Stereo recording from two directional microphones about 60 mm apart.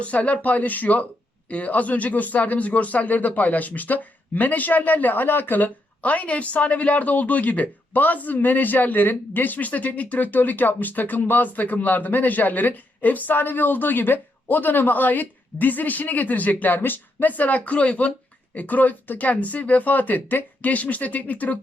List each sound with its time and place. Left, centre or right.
0.0 s speech: left